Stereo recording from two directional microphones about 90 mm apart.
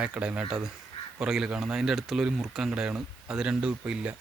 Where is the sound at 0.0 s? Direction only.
15° right (ahead or behind).